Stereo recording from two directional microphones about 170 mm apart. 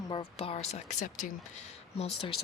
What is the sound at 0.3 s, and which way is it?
Speech, 40° left (ahead or behind).